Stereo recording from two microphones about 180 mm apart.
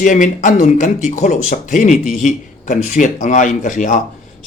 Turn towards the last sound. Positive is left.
turn(degrees=45)  # may be behind; listen again after turning